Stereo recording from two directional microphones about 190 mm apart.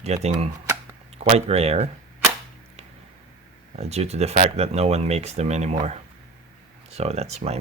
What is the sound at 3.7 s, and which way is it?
Speech, 35° right (ahead or behind).